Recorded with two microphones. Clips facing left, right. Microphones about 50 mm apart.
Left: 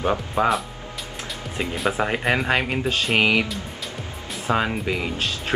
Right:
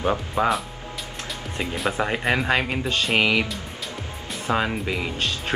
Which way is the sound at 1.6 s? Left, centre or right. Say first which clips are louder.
Left 2 dB; centre.